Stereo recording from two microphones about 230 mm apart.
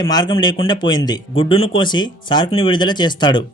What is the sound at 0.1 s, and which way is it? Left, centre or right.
A man's voice, centre.